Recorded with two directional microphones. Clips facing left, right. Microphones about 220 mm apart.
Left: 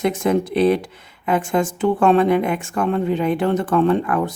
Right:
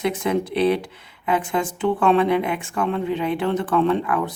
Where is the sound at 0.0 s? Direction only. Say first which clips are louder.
Left 3 dB; 45° left (ahead or behind).